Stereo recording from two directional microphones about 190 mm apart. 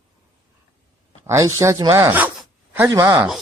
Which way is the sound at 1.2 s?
15° right (ahead or behind).